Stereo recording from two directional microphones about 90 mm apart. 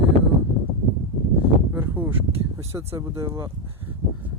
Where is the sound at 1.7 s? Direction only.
20° right (ahead or behind).